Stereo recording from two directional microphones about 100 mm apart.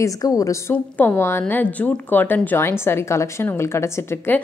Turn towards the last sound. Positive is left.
turn(degrees=25)  # may be behind; listen again after turning